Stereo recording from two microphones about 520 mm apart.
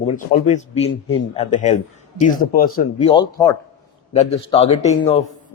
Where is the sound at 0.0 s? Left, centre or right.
Centre.